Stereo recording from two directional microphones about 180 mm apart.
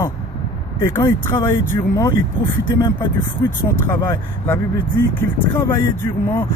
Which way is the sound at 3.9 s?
15° left (ahead or behind).